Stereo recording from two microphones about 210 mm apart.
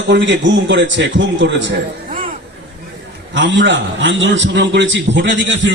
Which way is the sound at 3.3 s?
60° right (ahead or behind).